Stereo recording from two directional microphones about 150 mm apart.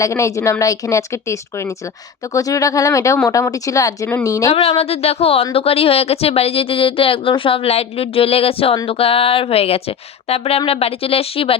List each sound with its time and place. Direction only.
0.0 s speech: 20° left (ahead or behind)
4.8 s speech: 40° left (ahead or behind)